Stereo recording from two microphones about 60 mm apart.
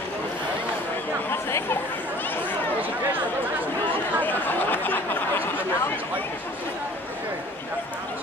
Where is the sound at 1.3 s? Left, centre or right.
Left.